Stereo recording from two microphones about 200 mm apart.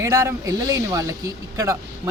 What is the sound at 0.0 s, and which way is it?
Speech, 15° right (ahead or behind).